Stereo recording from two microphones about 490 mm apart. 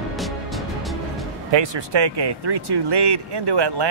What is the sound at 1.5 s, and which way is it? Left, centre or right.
Speech, right.